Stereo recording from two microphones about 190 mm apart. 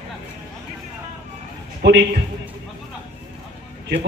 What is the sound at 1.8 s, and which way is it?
Speech, 65° right (ahead or behind).